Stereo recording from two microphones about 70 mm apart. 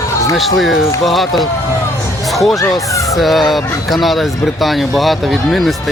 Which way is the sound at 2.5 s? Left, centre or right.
Left.